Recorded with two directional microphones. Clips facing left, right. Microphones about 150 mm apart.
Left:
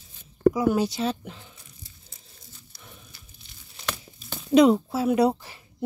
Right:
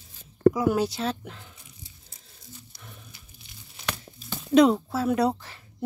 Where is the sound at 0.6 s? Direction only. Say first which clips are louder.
Left 1 dB; centre (ahead or behind).